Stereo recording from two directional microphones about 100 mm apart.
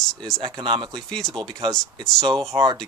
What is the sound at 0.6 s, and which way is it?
Speech, 55° right (ahead or behind).